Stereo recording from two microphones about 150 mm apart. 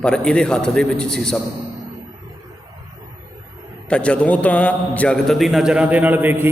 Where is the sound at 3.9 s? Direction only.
10° left (ahead or behind).